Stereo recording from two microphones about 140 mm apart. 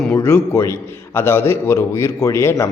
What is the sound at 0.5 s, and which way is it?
A man's voice, 20° left (ahead or behind).